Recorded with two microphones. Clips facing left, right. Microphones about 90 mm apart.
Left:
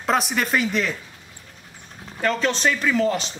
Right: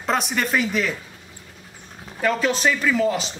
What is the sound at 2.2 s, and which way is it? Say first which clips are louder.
A man's voice: right 1 dB; 5° right (ahead or behind).